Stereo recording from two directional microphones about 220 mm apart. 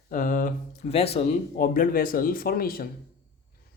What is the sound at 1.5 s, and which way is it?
Speech, 40° left (ahead or behind).